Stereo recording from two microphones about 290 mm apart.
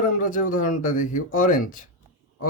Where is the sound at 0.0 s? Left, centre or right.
Left.